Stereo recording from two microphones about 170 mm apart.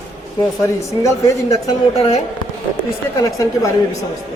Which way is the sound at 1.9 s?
40° left (ahead or behind).